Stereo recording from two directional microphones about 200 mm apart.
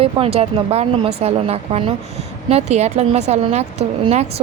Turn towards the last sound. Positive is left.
turn(degrees=-30)  # may be behind; listen again after turning